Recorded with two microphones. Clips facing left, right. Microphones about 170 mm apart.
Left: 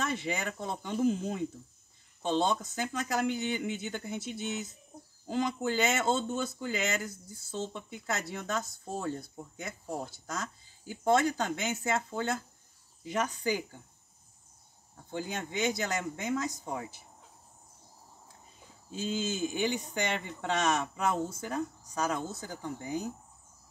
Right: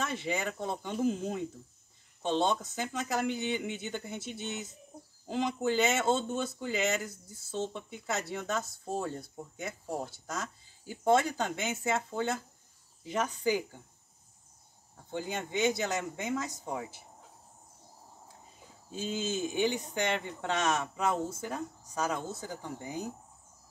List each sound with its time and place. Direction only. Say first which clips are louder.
0.0 s speech: even; centre (ahead or behind)
15.1 s speech: right 1 dB; centre (ahead or behind)
19.0 s speech: left 1 dB; centre (ahead or behind)